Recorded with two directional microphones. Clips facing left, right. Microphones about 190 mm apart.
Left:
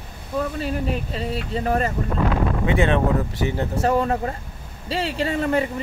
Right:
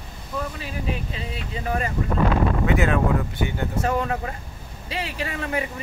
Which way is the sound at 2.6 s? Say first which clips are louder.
Left 4 dB; 30° left (ahead or behind).